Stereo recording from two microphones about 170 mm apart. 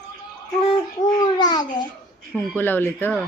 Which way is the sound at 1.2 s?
25° left (ahead or behind).